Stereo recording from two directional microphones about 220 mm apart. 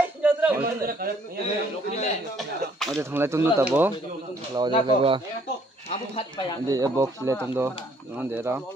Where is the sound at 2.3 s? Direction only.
Centre (ahead or behind).